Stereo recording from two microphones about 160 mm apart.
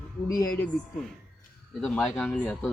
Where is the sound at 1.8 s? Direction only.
5° left (ahead or behind).